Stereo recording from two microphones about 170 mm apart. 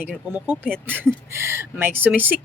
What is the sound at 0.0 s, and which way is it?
Speech, 10° right (ahead or behind).